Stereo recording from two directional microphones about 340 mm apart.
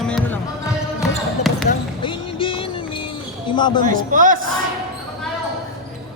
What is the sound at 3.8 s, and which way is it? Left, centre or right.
Speech, right.